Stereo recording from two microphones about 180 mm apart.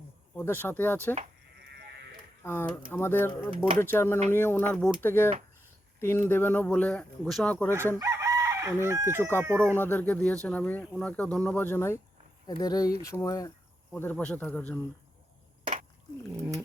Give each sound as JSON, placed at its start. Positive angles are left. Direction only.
{"t": 0.3, "sound": "speech", "side_deg": 10}
{"t": 2.4, "sound": "speech", "side_deg": 15}
{"t": 7.9, "sound": "chicken", "side_deg": -20}
{"t": 9.7, "sound": "speech", "side_deg": 10}
{"t": 13.9, "sound": "speech", "side_deg": 10}